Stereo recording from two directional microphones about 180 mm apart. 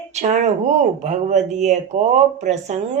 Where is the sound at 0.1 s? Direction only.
40° right (ahead or behind).